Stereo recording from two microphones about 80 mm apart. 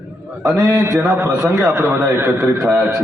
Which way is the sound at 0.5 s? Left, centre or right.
Right.